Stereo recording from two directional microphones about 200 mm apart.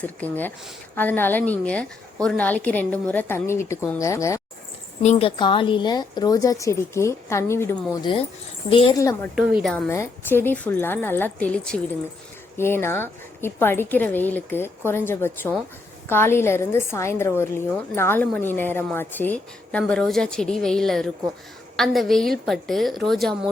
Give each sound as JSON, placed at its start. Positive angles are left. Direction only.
{"t": 0.0, "sound": "a woman's voice", "side_deg": 10}
{"t": 5.0, "sound": "a woman's voice", "side_deg": 25}
{"t": 9.3, "sound": "a woman's voice", "side_deg": -5}
{"t": 9.7, "sound": "a woman's voice", "side_deg": 10}